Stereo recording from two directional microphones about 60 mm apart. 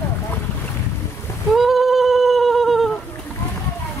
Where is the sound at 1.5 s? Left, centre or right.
Centre.